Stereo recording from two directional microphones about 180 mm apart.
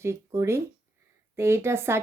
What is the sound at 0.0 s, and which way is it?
Speech, 15° right (ahead or behind).